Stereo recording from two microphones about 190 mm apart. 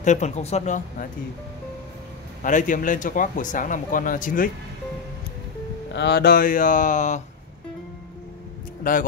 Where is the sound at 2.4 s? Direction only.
45° left (ahead or behind).